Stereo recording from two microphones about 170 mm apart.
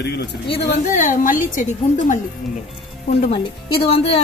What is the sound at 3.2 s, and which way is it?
Speech, 35° left (ahead or behind).